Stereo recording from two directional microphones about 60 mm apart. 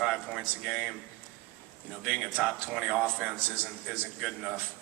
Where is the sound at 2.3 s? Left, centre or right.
Centre.